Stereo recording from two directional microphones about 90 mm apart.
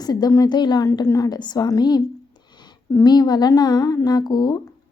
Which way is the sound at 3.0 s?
50° left (ahead or behind).